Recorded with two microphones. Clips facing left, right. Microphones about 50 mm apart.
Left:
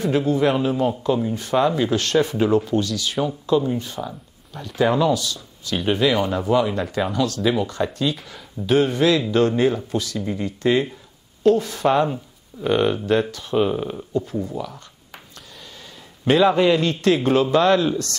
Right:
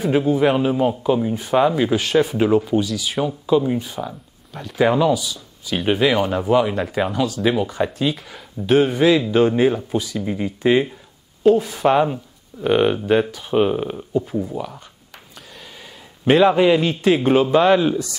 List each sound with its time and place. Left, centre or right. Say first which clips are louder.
0.1 s speech: right 3 dB; centre
16.5 s speech: right 2 dB; centre